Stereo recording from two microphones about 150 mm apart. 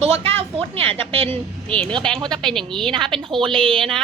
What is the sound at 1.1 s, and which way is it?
Speech, 40° right (ahead or behind).